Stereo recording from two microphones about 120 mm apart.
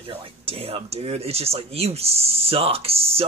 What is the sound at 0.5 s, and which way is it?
Speech, 55° right (ahead or behind).